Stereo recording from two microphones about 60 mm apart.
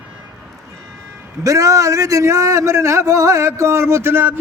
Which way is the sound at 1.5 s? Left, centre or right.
Right.